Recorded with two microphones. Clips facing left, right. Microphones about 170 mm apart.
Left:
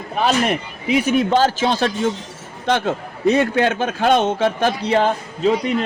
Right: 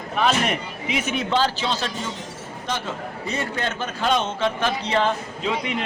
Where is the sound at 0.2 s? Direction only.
35° left (ahead or behind).